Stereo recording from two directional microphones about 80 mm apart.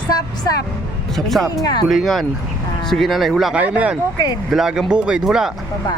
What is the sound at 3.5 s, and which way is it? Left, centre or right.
Speech, centre.